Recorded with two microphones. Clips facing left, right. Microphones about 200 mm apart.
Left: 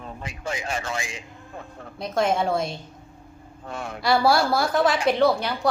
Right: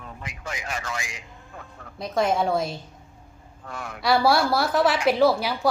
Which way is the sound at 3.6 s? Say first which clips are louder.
Left 3 dB; 25° left (ahead or behind).